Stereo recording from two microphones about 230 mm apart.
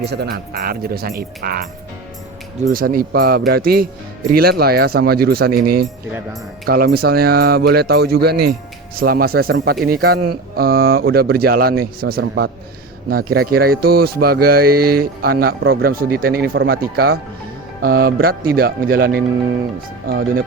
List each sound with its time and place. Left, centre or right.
0.0 s speech: right